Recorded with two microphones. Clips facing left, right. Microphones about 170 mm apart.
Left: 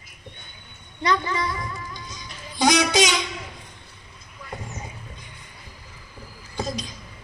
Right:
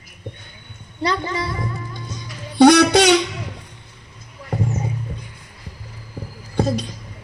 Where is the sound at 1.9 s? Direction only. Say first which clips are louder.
Right 5 dB; 55° right (ahead or behind).